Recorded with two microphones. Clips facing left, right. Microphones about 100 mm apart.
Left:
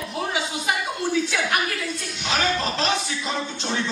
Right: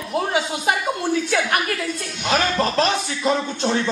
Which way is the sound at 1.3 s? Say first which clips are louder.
Right 3 dB; 50° right (ahead or behind).